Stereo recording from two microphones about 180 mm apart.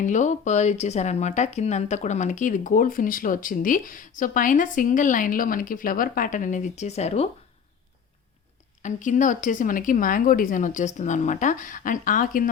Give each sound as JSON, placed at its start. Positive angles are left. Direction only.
{"t": 0.0, "sound": "speech", "side_deg": 45}
{"t": 8.8, "sound": "speech", "side_deg": 45}